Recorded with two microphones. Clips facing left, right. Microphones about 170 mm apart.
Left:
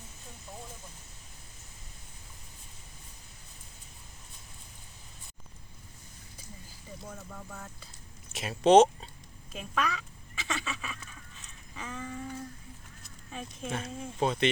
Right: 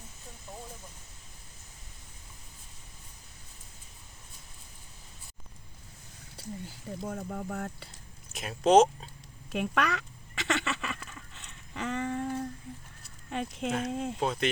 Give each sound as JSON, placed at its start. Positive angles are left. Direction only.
{"t": 6.3, "sound": "speech", "side_deg": -75}
{"t": 8.3, "sound": "speech", "side_deg": 0}
{"t": 9.5, "sound": "a sound", "side_deg": -70}
{"t": 13.3, "sound": "a woman's voice", "side_deg": -70}
{"t": 14.2, "sound": "speech", "side_deg": 0}